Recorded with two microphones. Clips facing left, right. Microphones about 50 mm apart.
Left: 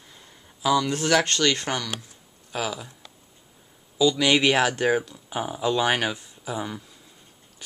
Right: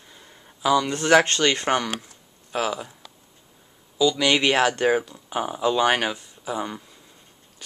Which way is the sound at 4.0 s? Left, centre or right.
Centre.